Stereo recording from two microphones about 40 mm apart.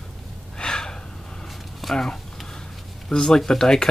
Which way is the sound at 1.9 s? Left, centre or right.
Centre.